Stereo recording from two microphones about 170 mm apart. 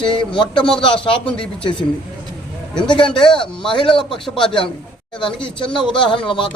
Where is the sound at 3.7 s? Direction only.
30° left (ahead or behind).